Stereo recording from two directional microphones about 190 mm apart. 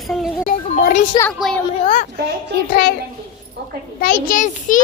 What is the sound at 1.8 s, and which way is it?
Speech, 30° left (ahead or behind).